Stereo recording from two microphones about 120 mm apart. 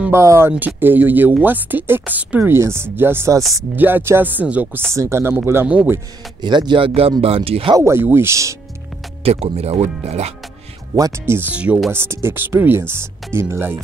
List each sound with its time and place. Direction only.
0.1 s speech: 20° right (ahead or behind)
4.9 s speech: 25° right (ahead or behind)
6.4 s speech: 40° right (ahead or behind)
7.7 s speech: 20° right (ahead or behind)
9.2 s speech: 55° right (ahead or behind)
11.0 s speech: 20° right (ahead or behind)